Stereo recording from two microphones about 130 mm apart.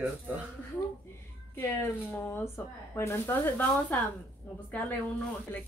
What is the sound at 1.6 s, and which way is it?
Speech, 20° left (ahead or behind).